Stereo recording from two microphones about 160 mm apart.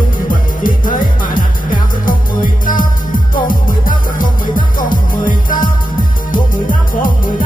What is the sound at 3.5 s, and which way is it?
Music, 60° left (ahead or behind).